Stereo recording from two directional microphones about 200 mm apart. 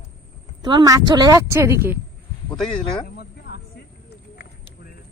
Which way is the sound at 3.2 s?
55° left (ahead or behind).